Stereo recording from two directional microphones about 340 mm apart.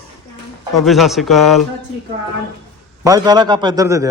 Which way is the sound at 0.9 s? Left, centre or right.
Centre.